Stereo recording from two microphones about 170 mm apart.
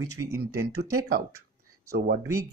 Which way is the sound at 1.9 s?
65° right (ahead or behind).